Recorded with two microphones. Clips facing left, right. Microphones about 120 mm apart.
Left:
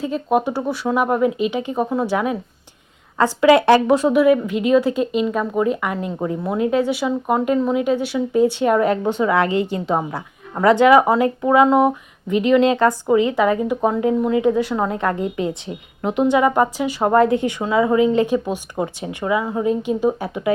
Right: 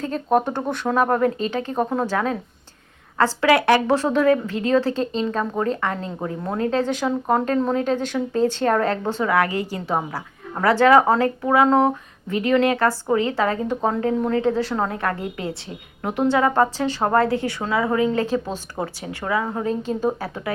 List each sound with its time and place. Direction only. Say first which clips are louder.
0.0 s speech: left 1 dB; 10° left (ahead or behind)